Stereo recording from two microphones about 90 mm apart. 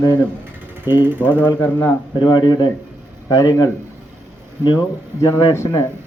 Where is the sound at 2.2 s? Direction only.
55° left (ahead or behind).